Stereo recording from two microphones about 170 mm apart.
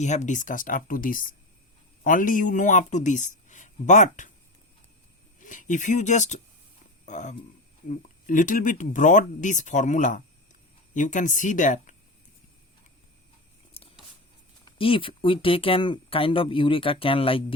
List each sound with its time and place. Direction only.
0.0 s speech: 45° left (ahead or behind)
5.4 s speech: 50° left (ahead or behind)
13.7 s a sound: 35° left (ahead or behind)
14.6 s speech: 30° left (ahead or behind)